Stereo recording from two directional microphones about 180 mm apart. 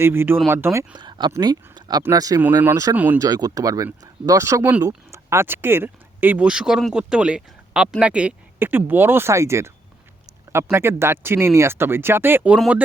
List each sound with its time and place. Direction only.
0.0 s speech: 15° right (ahead or behind)
3.2 s speech: 20° right (ahead or behind); by 12.8 s 5° right (ahead or behind)